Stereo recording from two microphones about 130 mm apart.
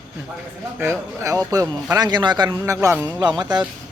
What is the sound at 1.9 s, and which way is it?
A man's voice, 30° right (ahead or behind).